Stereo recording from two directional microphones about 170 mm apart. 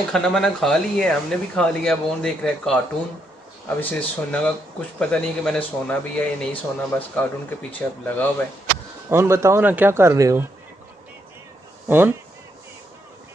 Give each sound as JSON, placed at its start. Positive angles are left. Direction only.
{"t": 0.1, "sound": "a man's voice", "side_deg": 5}
{"t": 9.1, "sound": "speech", "side_deg": -15}
{"t": 11.9, "sound": "speech", "side_deg": -10}